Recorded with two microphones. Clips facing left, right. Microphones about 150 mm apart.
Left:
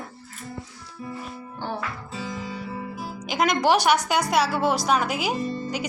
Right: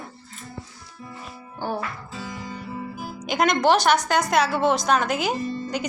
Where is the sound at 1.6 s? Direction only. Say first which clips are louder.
Right 3 dB; 10° right (ahead or behind).